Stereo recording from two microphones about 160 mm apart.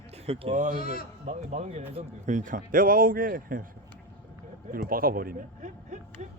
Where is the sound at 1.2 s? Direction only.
50° right (ahead or behind).